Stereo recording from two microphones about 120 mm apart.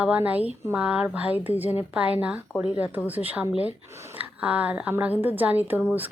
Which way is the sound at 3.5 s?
55° left (ahead or behind).